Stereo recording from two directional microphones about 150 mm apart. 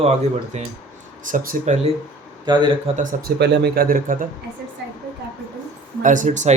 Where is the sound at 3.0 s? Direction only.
75° right (ahead or behind).